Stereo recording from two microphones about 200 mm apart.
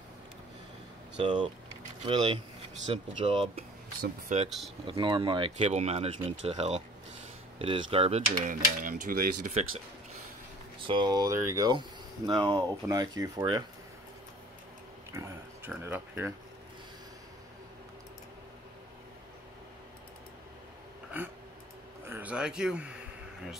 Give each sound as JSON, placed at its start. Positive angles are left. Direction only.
{"t": 1.2, "sound": "speech", "side_deg": -30}
{"t": 4.5, "sound": "speech", "side_deg": 0}
{"t": 4.8, "sound": "speech", "side_deg": -25}
{"t": 8.3, "sound": "speech", "side_deg": -40}
{"t": 10.9, "sound": "speech", "side_deg": -20}
{"t": 15.1, "sound": "a sound", "side_deg": -15}
{"t": 15.8, "sound": "speech", "side_deg": -10}
{"t": 21.2, "sound": "a sound", "side_deg": -10}